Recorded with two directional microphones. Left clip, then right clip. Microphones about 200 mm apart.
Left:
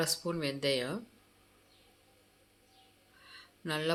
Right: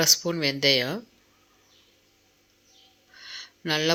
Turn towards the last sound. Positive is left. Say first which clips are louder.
# right 10 dB
turn(degrees=-30)  # may be behind; listen again after turning